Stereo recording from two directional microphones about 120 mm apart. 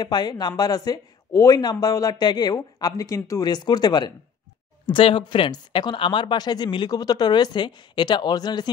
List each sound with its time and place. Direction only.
0.0 s speech: 35° left (ahead or behind)
4.8 s speech: 45° left (ahead or behind)